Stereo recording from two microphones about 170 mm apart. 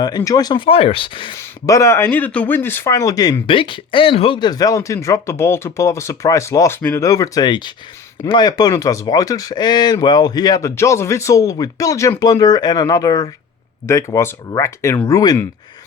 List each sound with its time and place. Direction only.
0.2 s a man's voice: 20° left (ahead or behind)
1.4 s a man's voice: 20° left (ahead or behind)